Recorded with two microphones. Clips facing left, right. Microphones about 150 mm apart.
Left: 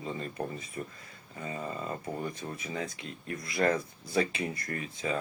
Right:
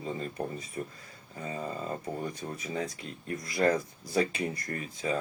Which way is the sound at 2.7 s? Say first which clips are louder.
Right 2 dB; 35° right (ahead or behind).